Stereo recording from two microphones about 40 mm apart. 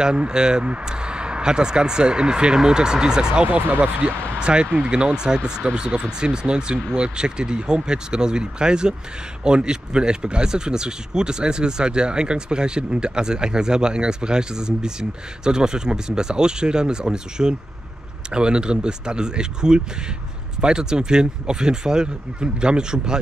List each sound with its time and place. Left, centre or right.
0.0 s speech: right
3.4 s speech: right
4.0 s speech: right